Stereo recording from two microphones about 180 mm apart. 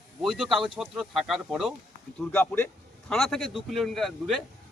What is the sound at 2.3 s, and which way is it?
A man's voice, 10° left (ahead or behind).